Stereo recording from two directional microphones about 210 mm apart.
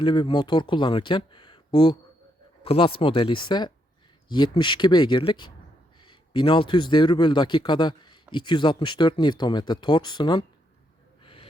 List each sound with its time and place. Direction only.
0.0 s speech: 20° left (ahead or behind)
11.2 s gasp: 25° left (ahead or behind)